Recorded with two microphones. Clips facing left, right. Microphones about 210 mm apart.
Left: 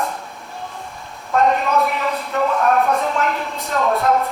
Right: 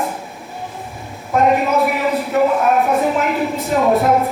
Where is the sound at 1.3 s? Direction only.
15° right (ahead or behind).